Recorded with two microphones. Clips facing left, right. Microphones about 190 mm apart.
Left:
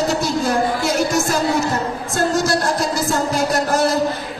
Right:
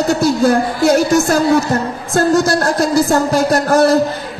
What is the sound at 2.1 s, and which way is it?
Music, 55° right (ahead or behind).